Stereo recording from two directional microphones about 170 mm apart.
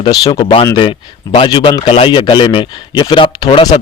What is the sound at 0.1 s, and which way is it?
A man's voice, 30° left (ahead or behind).